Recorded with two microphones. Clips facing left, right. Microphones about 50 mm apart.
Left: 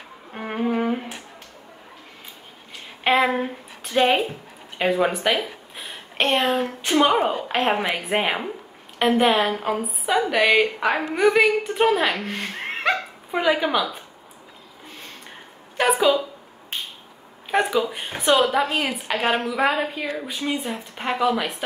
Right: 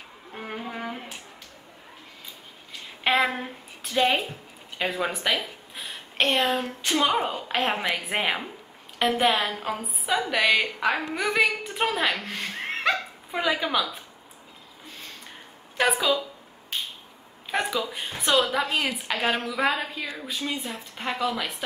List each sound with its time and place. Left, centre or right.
0.3 s music: left
3.0 s a sound: centre
3.3 s speech: centre
5.4 s a sound: centre
6.6 s a woman's voice: centre
8.0 s a sound: centre
9.1 s a woman's voice: centre
15.9 s a woman's voice: left
17.6 s a woman's voice: centre